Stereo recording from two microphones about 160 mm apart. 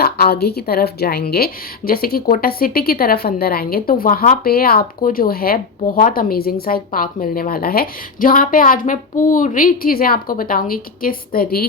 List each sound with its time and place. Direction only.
0.0 s a woman's voice: 75° left (ahead or behind)